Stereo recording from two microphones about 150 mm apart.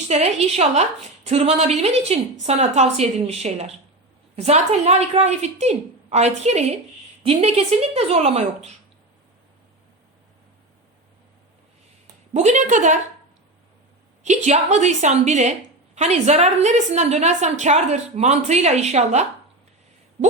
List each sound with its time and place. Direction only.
0.1 s a woman's voice: 45° right (ahead or behind)
12.3 s a woman's voice: 50° right (ahead or behind)
14.3 s a woman's voice: 50° right (ahead or behind)